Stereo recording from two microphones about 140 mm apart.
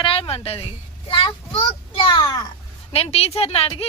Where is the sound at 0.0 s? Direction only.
40° left (ahead or behind).